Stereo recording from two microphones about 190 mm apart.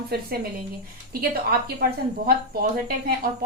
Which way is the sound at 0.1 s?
55° right (ahead or behind).